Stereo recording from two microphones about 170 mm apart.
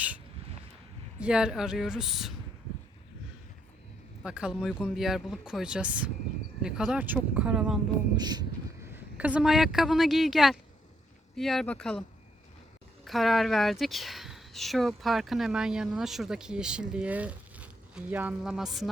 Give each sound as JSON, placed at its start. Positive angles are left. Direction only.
{"t": 1.2, "sound": "speech", "side_deg": -5}
{"t": 4.2, "sound": "speech", "side_deg": -5}
{"t": 8.2, "sound": "a sound", "side_deg": -25}
{"t": 9.1, "sound": "speech", "side_deg": -10}
{"t": 13.1, "sound": "speech", "side_deg": 0}